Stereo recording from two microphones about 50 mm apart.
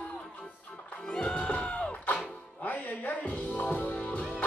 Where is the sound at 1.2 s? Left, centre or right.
Left.